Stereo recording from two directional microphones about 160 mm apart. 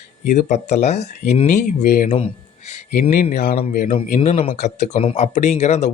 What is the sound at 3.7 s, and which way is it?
Speech, 60° left (ahead or behind).